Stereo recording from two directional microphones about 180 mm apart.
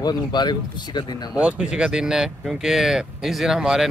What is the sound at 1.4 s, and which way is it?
Speech, 5° right (ahead or behind).